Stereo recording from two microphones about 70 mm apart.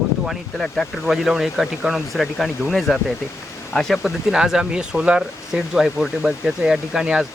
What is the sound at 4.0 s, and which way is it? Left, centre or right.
Speech, centre.